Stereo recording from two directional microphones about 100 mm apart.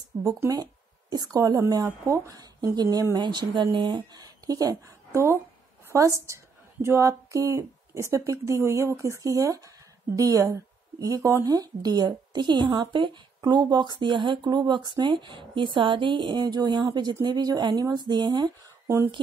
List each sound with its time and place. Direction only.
1.1 s a woman's voice: 40° right (ahead or behind)